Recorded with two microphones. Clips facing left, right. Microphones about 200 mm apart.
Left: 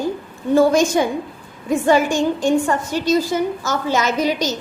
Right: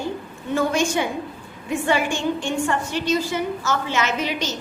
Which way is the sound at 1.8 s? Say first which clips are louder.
Left 6 dB; 40° left (ahead or behind).